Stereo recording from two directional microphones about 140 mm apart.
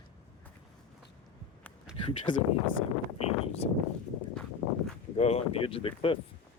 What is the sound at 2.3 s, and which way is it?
Speech, 70° left (ahead or behind).